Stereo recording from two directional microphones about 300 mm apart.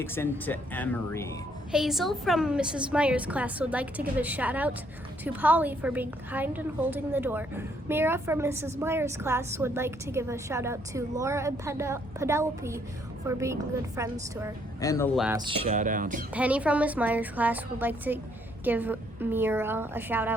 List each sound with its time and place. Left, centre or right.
0.0 s a woman's voice: centre
14.8 s speech: centre
15.4 s speech: centre
16.3 s a woman's voice: centre